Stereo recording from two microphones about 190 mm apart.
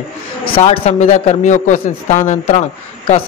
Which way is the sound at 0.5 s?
30° left (ahead or behind).